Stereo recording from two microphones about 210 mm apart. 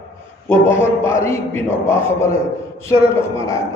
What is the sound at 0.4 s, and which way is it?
A man's voice, 10° left (ahead or behind).